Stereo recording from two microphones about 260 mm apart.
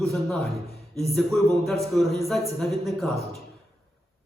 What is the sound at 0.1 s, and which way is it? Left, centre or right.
A man's voice, centre.